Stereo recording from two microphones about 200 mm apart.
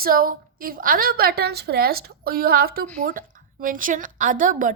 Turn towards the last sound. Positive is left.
turn(degrees=-40)  # may be behind; listen again after turning